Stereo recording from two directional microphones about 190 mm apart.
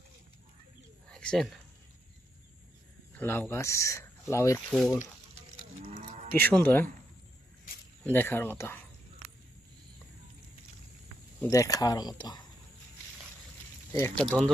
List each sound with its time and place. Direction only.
1.0 s a sound: 5° left (ahead or behind)
3.2 s speech: 10° left (ahead or behind)
4.6 s speech: centre (ahead or behind)
5.8 s cattle: 40° right (ahead or behind)
6.4 s speech: 10° left (ahead or behind)
8.0 s speech: 10° left (ahead or behind)
11.5 s speech: 15° left (ahead or behind)
13.9 s speech: 10° left (ahead or behind)